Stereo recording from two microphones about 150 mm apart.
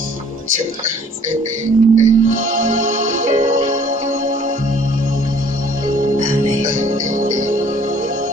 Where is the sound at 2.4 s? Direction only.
60° right (ahead or behind).